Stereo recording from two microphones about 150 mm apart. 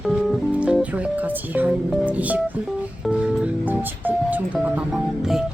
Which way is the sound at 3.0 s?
5° right (ahead or behind).